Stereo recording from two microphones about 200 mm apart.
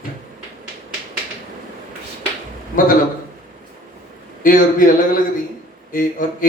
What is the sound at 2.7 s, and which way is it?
Speech, 45° left (ahead or behind).